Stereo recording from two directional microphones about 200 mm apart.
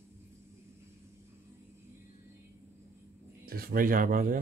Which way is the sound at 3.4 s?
45° right (ahead or behind).